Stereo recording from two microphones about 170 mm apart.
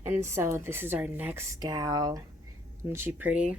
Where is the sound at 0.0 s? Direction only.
15° right (ahead or behind).